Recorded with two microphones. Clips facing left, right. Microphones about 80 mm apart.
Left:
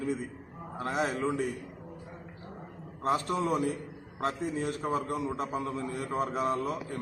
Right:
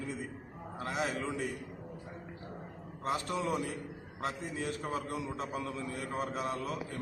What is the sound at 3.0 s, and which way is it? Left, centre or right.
A man's voice, left.